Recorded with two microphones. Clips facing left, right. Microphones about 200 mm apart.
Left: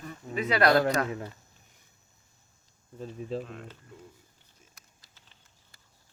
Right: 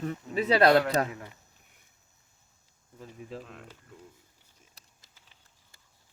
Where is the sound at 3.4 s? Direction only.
5° right (ahead or behind).